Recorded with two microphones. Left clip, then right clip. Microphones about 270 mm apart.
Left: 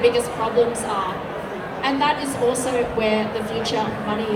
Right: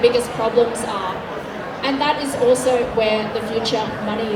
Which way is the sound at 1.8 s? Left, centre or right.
Right.